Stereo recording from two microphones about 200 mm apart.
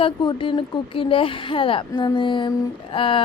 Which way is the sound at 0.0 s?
25° left (ahead or behind).